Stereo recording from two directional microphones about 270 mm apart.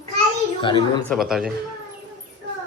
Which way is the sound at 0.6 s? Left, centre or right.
Centre.